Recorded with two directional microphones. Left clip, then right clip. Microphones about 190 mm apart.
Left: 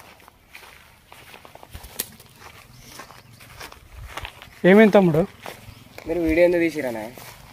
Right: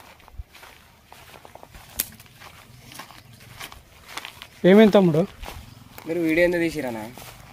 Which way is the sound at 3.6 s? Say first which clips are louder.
Right 1 dB; 40° right (ahead or behind).